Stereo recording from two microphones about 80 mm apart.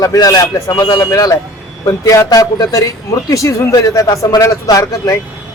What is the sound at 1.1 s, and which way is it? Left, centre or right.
Speech, left.